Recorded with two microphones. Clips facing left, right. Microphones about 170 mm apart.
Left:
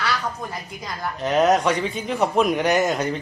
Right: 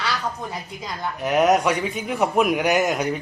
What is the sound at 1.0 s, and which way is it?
A man's voice, 15° right (ahead or behind).